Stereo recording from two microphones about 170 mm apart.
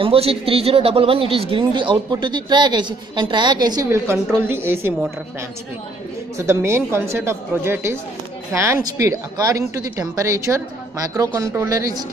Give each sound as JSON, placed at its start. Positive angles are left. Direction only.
{"t": 0.0, "sound": "speech", "side_deg": -35}
{"t": 6.3, "sound": "speech", "side_deg": -15}